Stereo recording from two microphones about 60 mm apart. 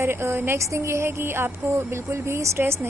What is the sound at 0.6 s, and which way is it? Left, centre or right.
A woman's voice, right.